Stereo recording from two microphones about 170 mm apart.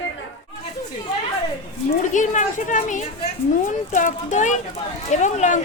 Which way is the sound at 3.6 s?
50° left (ahead or behind).